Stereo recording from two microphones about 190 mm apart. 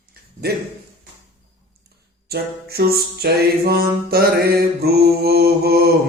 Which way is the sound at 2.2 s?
55° right (ahead or behind).